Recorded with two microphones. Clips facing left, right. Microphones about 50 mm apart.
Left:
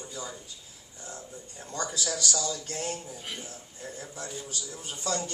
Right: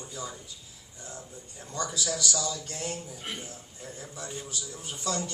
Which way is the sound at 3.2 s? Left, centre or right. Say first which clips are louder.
Right 1 dB; right.